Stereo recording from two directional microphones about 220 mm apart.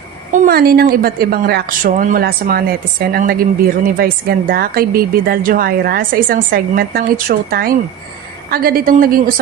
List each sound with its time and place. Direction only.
0.4 s a woman's voice: 40° right (ahead or behind)